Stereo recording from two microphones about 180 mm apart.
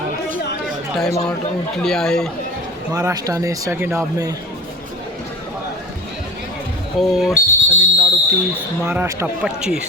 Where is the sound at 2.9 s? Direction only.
20° right (ahead or behind).